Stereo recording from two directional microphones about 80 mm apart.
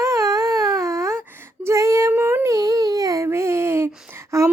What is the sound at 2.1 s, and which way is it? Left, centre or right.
Humming, right.